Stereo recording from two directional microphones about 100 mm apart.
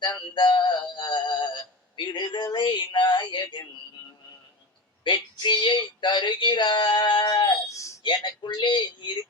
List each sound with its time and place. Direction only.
0.0 s synthetic singing: 50° left (ahead or behind)
2.0 s speech: 50° left (ahead or behind)
5.0 s speech: 50° left (ahead or behind)
7.7 s a sound: 30° left (ahead or behind)
8.0 s speech: 50° left (ahead or behind)